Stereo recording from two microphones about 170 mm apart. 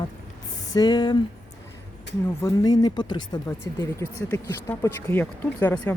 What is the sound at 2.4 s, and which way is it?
Speech, 25° left (ahead or behind).